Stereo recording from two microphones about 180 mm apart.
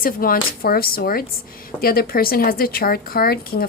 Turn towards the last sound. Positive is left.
turn(degrees=55)  # may be behind; listen again after turning